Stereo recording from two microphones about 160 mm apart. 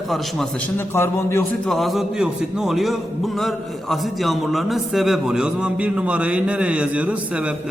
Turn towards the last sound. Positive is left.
turn(degrees=-10)  # may be behind; listen again after turning